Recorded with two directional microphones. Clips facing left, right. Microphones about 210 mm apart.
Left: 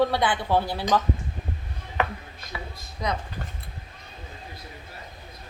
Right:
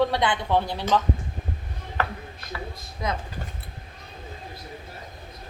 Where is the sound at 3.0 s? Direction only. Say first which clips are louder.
Even; 5° right (ahead or behind).